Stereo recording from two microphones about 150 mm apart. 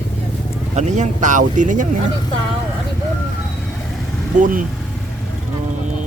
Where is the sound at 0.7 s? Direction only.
55° right (ahead or behind).